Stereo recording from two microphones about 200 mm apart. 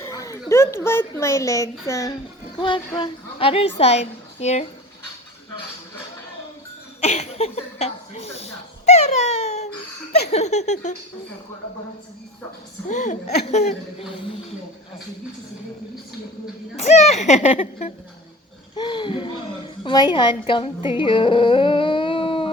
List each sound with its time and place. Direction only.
0.0 s speech: 15° left (ahead or behind); by 4.6 s 35° left (ahead or behind)
7.0 s speech: 35° left (ahead or behind)
8.9 s a sound: 35° left (ahead or behind)
10.1 s a child's voice: 35° left (ahead or behind)
12.9 s a child's voice: 35° left (ahead or behind)
16.7 s a child's voice: 35° left (ahead or behind)